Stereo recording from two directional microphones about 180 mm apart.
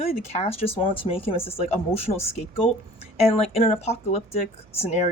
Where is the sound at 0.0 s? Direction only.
35° left (ahead or behind).